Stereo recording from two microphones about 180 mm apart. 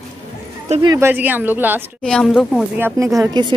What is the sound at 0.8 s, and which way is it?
Speech, 15° right (ahead or behind).